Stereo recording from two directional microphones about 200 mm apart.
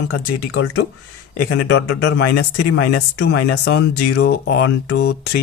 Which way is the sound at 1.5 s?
55° left (ahead or behind).